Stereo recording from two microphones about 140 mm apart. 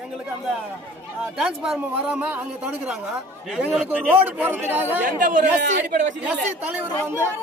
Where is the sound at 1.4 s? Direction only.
5° right (ahead or behind).